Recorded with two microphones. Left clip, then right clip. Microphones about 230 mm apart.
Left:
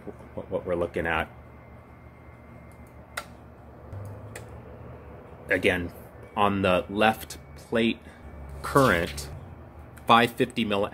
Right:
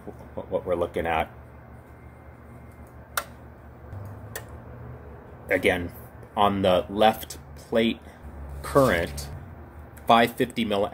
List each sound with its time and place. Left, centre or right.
0.5 s speech: left
5.5 s speech: centre